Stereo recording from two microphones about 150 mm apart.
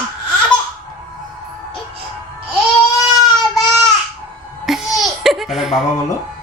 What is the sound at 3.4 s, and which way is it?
Baby cry, centre (ahead or behind).